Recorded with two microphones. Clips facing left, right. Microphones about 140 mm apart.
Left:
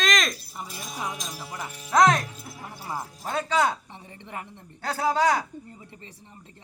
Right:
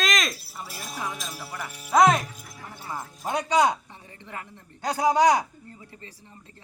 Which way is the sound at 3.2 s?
15° right (ahead or behind).